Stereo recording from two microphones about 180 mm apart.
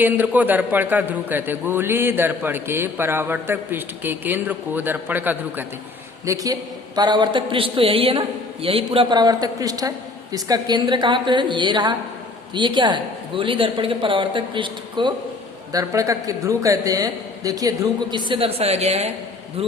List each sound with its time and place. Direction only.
0.0 s a man's voice: 10° right (ahead or behind); by 19.1 s 35° right (ahead or behind)